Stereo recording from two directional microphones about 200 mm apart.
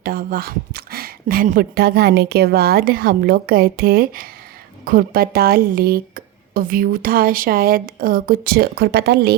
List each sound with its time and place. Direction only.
0.0 s speech: 45° right (ahead or behind)